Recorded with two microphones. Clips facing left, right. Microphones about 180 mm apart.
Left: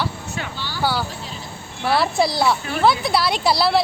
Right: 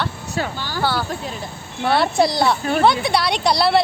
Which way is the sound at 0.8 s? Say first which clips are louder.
Right 1 dB; 10° left (ahead or behind).